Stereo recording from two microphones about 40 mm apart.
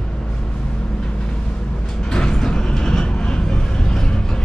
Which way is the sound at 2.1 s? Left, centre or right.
Centre.